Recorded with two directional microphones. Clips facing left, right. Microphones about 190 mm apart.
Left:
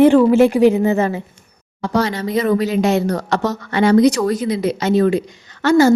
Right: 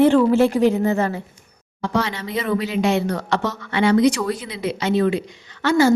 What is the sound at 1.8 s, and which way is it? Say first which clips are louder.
Speech: left 4 dB; 40° left (ahead or behind).